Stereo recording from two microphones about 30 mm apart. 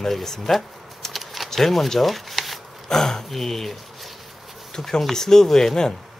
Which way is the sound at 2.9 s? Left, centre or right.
Centre.